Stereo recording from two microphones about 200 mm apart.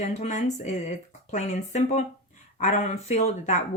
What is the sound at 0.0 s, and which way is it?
Speech, 35° left (ahead or behind).